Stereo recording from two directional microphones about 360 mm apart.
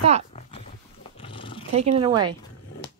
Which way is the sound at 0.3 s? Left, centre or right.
Centre.